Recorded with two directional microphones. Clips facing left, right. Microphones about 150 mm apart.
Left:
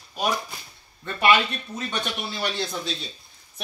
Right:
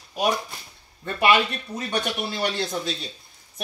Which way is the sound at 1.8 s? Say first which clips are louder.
Right 4 dB; 10° right (ahead or behind).